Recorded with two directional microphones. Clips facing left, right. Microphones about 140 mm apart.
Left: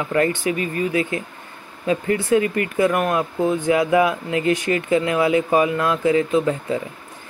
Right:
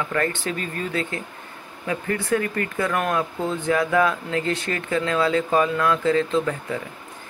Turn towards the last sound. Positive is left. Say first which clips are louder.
# left 4 dB
turn(degrees=20)  # may be behind; listen again after turning